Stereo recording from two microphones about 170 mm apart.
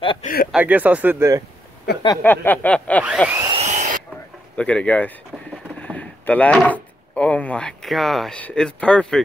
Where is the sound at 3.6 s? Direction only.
45° right (ahead or behind).